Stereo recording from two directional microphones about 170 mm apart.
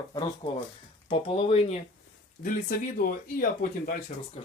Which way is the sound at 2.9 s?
55° left (ahead or behind).